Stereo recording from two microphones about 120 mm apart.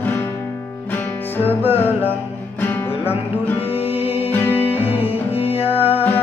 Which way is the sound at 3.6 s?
55° left (ahead or behind).